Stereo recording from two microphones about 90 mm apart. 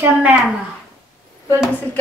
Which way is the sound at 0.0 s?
15° right (ahead or behind).